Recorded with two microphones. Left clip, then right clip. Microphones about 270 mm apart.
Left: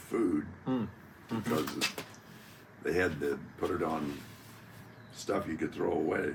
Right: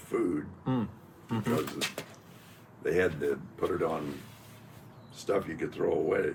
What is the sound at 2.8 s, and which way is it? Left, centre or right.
Speech, centre.